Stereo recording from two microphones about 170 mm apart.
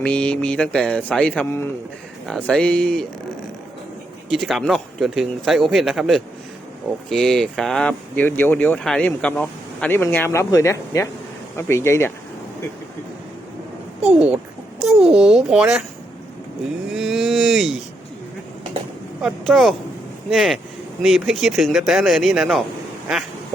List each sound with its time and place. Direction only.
0.0 s speech: 5° left (ahead or behind)
4.3 s speech: centre (ahead or behind); by 12.1 s 15° left (ahead or behind)
14.0 s a child's voice: 5° right (ahead or behind)
16.9 s speech: centre (ahead or behind)
19.2 s speech: centre (ahead or behind)